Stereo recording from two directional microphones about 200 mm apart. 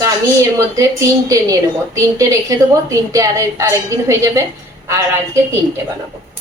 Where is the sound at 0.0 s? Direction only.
15° right (ahead or behind).